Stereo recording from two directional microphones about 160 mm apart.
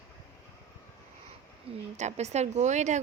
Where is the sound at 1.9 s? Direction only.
45° right (ahead or behind).